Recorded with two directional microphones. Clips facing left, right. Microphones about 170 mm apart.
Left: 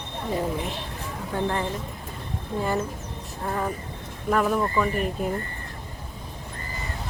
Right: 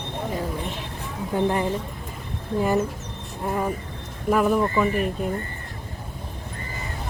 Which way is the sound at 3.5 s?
10° right (ahead or behind).